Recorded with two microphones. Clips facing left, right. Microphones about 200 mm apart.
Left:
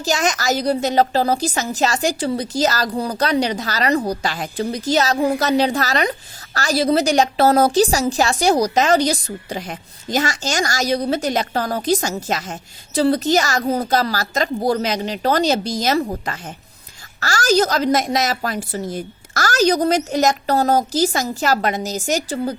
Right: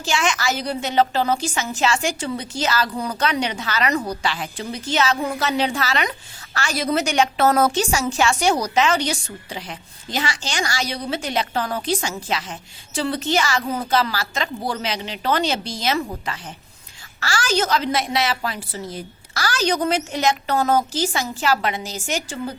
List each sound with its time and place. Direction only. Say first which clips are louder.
0.0 s a woman's voice: left 2 dB; 40° left (ahead or behind)